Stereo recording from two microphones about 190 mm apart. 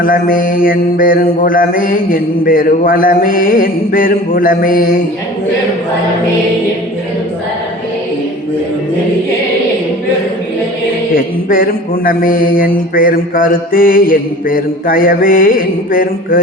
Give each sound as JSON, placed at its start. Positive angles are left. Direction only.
{"t": 0.0, "sound": "mantra", "side_deg": 50}
{"t": 11.1, "sound": "mantra", "side_deg": 50}